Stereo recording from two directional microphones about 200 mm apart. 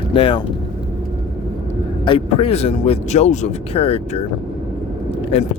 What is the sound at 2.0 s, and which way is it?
Speech, 25° left (ahead or behind).